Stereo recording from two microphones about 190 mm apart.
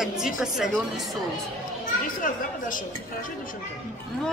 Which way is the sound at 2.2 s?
45° left (ahead or behind).